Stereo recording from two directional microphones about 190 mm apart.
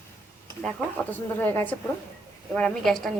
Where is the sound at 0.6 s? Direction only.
5° left (ahead or behind).